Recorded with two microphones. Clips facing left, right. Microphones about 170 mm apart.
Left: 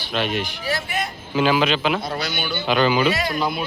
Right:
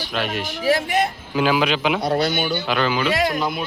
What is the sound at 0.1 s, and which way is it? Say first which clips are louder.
Speech: left 3 dB; 5° right (ahead or behind).